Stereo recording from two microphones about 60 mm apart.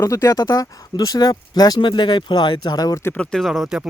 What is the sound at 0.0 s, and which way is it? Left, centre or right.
Speech, left.